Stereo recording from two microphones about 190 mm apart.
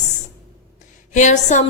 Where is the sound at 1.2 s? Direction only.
40° left (ahead or behind).